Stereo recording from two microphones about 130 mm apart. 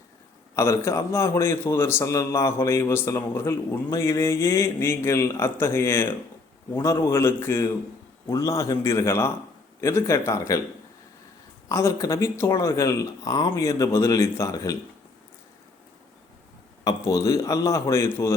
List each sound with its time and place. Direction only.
0.5 s a man's voice: 20° left (ahead or behind)
11.7 s a man's voice: 20° left (ahead or behind)
16.8 s a man's voice: 25° left (ahead or behind)